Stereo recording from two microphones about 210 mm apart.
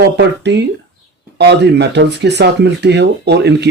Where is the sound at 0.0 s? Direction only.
55° right (ahead or behind).